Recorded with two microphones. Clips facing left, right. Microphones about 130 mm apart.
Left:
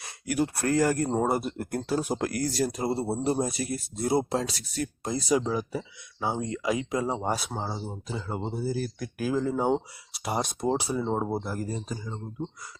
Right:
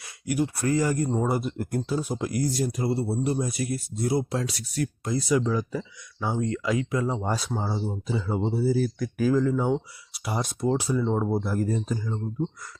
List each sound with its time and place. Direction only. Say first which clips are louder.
0.0 s a sound: right 1 dB; 40° left (ahead or behind)
0.7 s speech: left 1 dB; 60° left (ahead or behind); by 2.7 s 75° left (ahead or behind)
2.7 s speech: right 2 dB; 25° left (ahead or behind)
5.5 s speech: right 2 dB; 10° left (ahead or behind)
7.3 s speech: right 3 dB; 5° left (ahead or behind)
7.7 s speech: right 5 dB; 5° right (ahead or behind)
9.5 s speech: right 1 dB; 35° left (ahead or behind)
10.2 s speech: right 1 dB; 20° left (ahead or behind)
11.4 s speech: right 6 dB; 5° left (ahead or behind)